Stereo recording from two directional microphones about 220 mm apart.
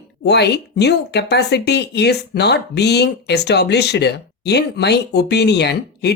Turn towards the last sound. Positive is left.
turn(degrees=50)  # may be behind; listen again after turning